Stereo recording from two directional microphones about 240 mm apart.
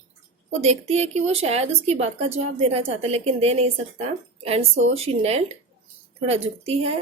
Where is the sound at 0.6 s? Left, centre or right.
Right.